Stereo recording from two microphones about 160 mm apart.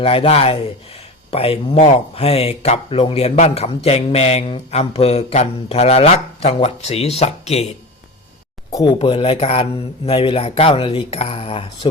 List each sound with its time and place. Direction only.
0.0 s speech: 35° left (ahead or behind)
8.7 s speech: 25° left (ahead or behind)